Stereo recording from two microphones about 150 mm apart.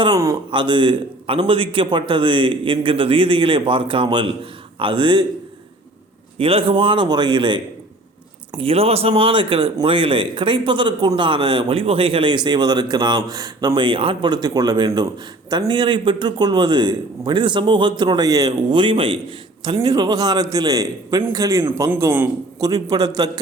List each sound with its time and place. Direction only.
0.0 s a man's voice: 25° right (ahead or behind)
6.4 s a man's voice: 35° right (ahead or behind)